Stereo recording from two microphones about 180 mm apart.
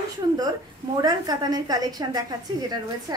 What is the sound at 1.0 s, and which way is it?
A woman's voice, 20° right (ahead or behind).